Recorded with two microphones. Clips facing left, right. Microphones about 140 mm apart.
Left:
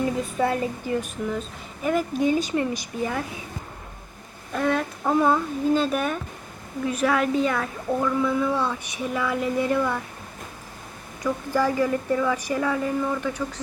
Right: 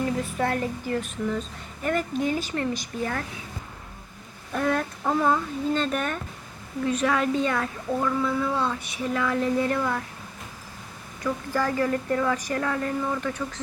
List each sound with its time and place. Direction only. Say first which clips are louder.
0.3 s a woman's voice: left 2 dB; 15° left (ahead or behind)
4.5 s a woman's voice: left 1 dB; centre (ahead or behind)
11.2 s a woman's voice: left 3 dB; 10° left (ahead or behind)